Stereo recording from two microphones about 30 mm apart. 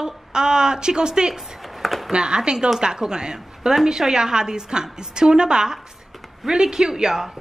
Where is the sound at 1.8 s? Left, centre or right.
Centre.